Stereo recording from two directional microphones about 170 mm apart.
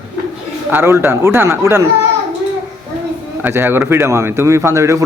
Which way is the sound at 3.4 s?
10° right (ahead or behind).